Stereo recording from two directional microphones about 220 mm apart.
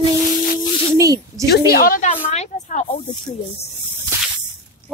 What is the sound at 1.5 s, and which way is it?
Speech, 45° left (ahead or behind).